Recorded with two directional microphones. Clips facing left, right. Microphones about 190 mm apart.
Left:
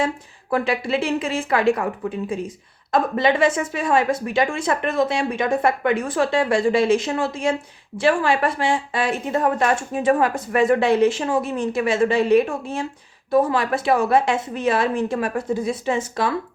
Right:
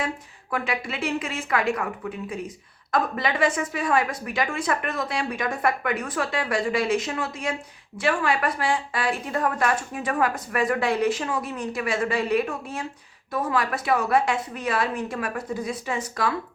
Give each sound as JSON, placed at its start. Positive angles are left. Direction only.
{"t": 0.5, "sound": "a woman's voice", "side_deg": 30}